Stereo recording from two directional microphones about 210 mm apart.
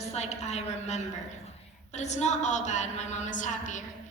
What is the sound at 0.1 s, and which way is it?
A woman's voice, 30° left (ahead or behind).